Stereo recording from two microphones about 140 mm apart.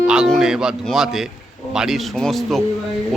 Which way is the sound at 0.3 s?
5° right (ahead or behind).